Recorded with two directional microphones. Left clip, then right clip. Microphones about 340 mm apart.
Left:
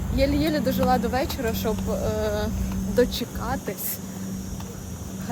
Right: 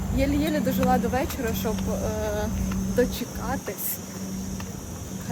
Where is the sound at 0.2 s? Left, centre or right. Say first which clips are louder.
Left 2 dB; centre.